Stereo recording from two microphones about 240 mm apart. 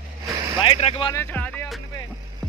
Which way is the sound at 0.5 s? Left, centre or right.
Left.